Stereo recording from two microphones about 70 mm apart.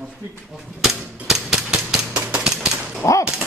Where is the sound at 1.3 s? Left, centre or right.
Centre.